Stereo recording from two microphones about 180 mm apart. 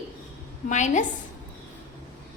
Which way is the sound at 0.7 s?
40° left (ahead or behind).